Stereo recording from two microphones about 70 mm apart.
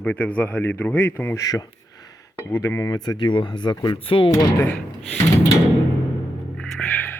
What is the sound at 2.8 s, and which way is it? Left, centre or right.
Speech, left.